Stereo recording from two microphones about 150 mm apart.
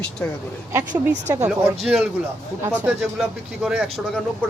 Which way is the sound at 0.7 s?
15° right (ahead or behind).